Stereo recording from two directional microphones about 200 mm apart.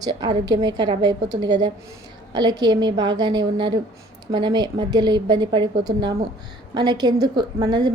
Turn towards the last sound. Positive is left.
turn(degrees=-20)  # may be behind; listen again after turning